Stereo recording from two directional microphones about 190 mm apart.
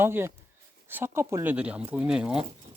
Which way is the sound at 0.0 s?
10° right (ahead or behind).